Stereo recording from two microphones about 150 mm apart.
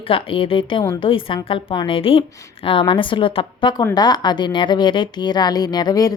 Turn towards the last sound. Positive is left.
turn(degrees=25)  # may be behind; listen again after turning